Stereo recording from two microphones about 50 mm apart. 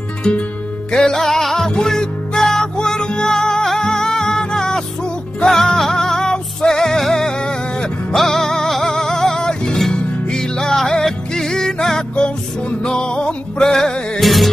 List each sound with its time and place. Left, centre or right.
0.9 s music: centre
14.2 s music: centre